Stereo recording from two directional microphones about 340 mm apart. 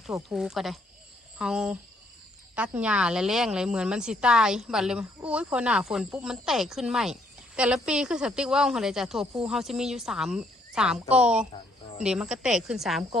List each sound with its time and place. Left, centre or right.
0.1 s speech: centre